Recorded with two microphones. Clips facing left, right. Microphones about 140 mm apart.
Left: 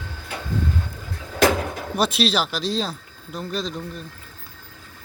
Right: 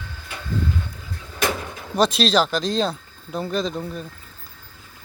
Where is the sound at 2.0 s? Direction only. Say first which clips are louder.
Right 3 dB; 5° left (ahead or behind).